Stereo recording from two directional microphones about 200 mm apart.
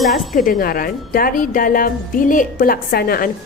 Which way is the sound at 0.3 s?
45° left (ahead or behind).